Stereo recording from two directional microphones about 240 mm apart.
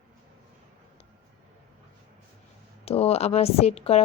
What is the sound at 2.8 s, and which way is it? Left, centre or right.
Speech, left.